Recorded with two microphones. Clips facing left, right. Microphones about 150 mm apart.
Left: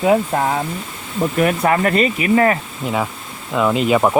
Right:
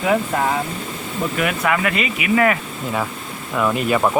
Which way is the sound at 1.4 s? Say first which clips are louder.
Left 5 dB; 35° left (ahead or behind).